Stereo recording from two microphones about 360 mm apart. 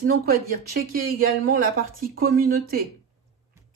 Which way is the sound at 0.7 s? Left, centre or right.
Right.